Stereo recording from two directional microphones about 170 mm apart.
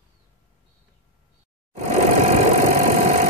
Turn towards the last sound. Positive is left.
turn(degrees=-45)  # may be behind; listen again after turning